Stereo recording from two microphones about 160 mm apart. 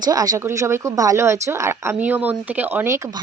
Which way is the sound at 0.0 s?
25° right (ahead or behind).